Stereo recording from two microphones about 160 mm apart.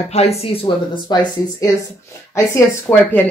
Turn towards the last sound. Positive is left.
turn(degrees=10)  # may be behind; listen again after turning